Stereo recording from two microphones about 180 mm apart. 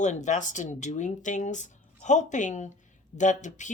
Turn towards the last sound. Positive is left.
turn(degrees=45)  # may be behind; listen again after turning